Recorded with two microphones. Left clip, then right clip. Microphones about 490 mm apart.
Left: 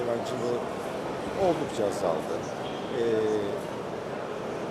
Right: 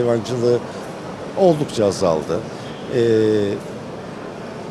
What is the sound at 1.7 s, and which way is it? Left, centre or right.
A man's voice, right.